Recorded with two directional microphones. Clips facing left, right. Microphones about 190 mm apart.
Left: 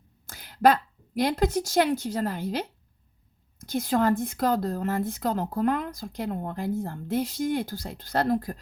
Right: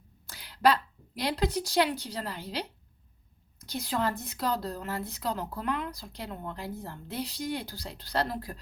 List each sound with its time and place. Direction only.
0.3 s a woman's voice: 50° left (ahead or behind)